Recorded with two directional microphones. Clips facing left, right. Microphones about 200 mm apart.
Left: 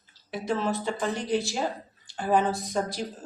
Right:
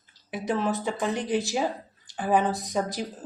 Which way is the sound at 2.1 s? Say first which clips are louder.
Right 1 dB; 5° right (ahead or behind).